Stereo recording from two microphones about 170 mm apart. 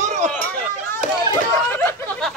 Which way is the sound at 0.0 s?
45° right (ahead or behind).